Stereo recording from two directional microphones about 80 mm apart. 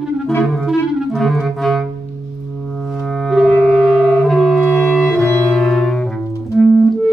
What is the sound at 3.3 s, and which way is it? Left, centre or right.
Clarinet, centre.